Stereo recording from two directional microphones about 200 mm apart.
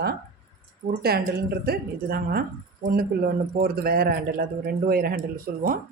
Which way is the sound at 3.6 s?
50° right (ahead or behind).